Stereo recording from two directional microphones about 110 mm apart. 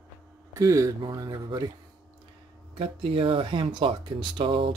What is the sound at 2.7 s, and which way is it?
Speech, 60° right (ahead or behind).